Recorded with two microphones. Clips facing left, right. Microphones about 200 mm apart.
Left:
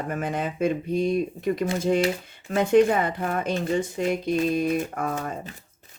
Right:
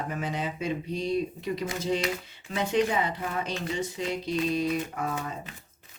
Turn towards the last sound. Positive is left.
turn(degrees=50)  # may be behind; listen again after turning